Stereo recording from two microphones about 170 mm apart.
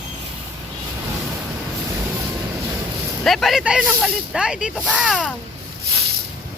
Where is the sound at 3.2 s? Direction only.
Centre (ahead or behind).